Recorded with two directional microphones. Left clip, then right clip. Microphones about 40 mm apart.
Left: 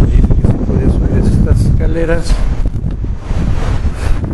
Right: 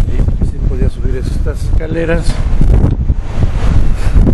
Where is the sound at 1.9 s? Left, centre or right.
Right.